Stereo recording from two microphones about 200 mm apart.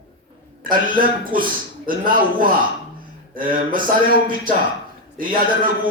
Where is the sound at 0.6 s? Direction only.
45° right (ahead or behind).